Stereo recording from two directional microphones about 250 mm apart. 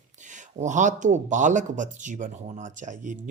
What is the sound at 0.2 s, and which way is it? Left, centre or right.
Speech, right.